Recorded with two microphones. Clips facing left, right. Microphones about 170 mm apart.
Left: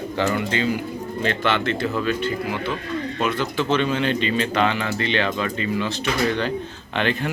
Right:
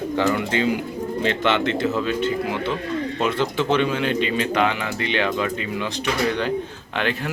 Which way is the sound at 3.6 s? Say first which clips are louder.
Left 1 dB; 15° right (ahead or behind).